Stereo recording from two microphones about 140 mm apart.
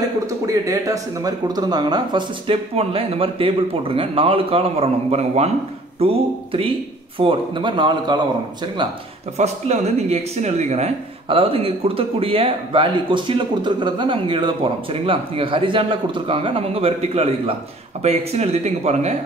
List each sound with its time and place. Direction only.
0.5 s speech: 25° right (ahead or behind)
9.4 s speech: 50° right (ahead or behind)